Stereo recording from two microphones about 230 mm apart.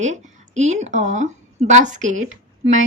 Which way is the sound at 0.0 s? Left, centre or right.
Right.